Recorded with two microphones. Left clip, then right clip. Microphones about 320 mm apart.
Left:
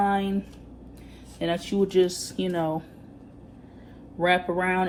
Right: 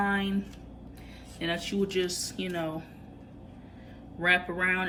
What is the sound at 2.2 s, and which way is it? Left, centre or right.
Speech, centre.